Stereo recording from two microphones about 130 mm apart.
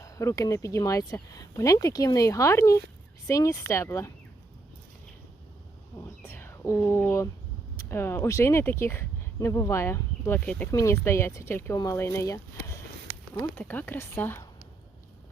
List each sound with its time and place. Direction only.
0.0 s speech: 25° left (ahead or behind)
6.0 s bird: 20° left (ahead or behind)
7.9 s speech: 20° left (ahead or behind)
10.7 s speech: 25° left (ahead or behind)